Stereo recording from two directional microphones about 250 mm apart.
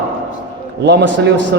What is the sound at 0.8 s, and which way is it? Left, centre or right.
Speech, right.